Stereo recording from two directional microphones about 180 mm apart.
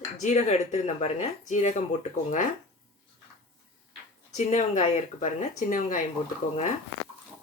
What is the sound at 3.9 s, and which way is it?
A woman's voice, 40° left (ahead or behind).